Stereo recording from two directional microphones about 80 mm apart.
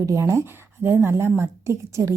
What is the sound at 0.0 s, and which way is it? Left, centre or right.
A woman's voice, right.